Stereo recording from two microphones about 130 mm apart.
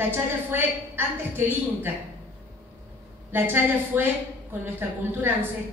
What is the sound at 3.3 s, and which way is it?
A woman's voice, 15° right (ahead or behind).